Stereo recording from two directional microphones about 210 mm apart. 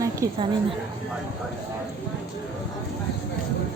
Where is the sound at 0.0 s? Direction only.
15° right (ahead or behind).